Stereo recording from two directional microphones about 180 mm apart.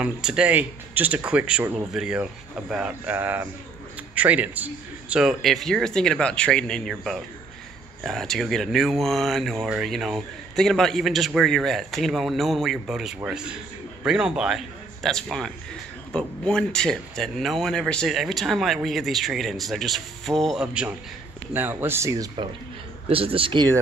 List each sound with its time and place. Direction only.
0.0 s a man's voice: 5° right (ahead or behind)
23.0 s speech: 30° right (ahead or behind)